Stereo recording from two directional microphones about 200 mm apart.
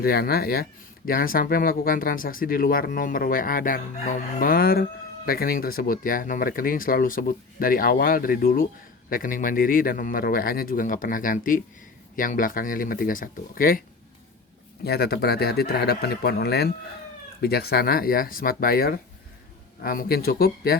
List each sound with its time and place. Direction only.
0.0 s speech: 50° left (ahead or behind)
14.8 s speech: 50° left (ahead or behind)